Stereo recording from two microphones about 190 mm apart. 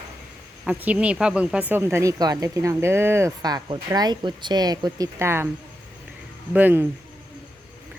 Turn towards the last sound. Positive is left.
turn(degrees=-10)  # may be behind; listen again after turning